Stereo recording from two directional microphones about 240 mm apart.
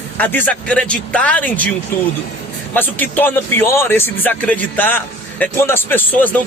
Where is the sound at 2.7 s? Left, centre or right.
Centre.